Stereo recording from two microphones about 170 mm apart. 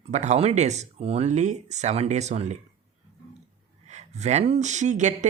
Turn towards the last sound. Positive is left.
turn(degrees=-45)  # may be behind; listen again after turning